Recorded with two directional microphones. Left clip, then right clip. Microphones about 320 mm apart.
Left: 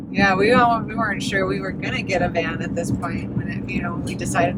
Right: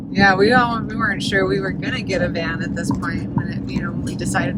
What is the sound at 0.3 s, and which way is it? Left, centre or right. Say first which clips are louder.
Speech: even; centre.